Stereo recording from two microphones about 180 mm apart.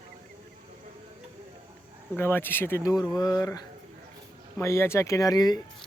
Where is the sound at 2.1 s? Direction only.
10° left (ahead or behind).